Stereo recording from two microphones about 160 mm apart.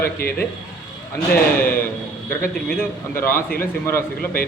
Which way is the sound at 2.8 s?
15° left (ahead or behind).